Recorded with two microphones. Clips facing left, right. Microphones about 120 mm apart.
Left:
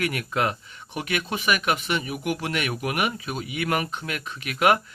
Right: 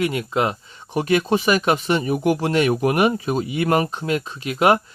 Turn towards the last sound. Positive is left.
turn(degrees=-30)  # may be behind; listen again after turning